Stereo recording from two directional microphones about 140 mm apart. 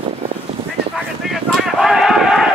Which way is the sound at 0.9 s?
Centre (ahead or behind).